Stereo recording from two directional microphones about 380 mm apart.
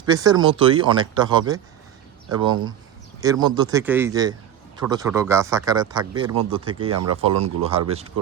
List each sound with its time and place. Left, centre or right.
0.0 s speech: centre
6.9 s speech: right
7.2 s speech: centre